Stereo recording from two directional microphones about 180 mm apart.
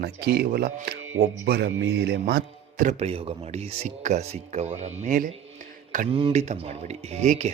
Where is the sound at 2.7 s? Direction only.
40° right (ahead or behind).